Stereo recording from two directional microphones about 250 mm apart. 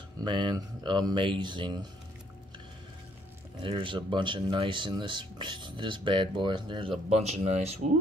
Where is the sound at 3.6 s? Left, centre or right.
Centre.